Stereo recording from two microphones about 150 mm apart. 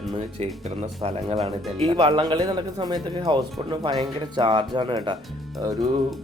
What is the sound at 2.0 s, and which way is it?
Speech, 40° right (ahead or behind).